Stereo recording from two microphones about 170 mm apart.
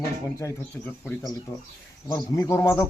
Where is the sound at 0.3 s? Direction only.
15° left (ahead or behind).